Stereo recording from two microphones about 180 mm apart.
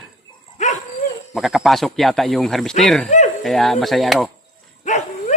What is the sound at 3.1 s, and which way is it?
Dog, 40° left (ahead or behind).